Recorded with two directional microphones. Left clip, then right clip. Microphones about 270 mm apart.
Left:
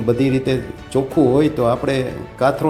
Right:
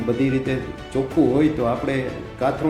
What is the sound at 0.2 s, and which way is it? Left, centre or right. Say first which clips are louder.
A man's voice: left 4 dB; left.